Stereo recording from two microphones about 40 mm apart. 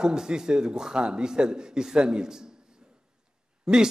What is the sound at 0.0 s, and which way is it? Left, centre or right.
A man's voice, centre.